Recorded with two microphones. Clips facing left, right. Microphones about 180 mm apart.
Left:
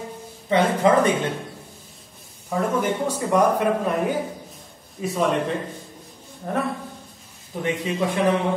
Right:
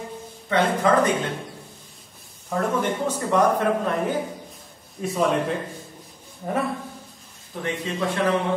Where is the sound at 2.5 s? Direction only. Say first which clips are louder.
Left 1 dB; centre (ahead or behind).